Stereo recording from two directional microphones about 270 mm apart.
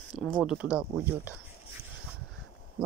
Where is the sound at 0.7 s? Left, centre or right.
Centre.